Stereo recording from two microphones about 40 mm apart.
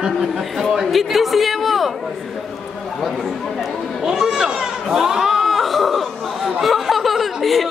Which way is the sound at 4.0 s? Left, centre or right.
Centre.